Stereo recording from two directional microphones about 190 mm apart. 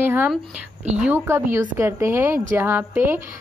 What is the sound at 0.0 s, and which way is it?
A woman's voice, 10° right (ahead or behind).